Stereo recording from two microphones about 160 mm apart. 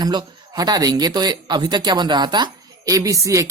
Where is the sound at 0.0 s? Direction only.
25° right (ahead or behind).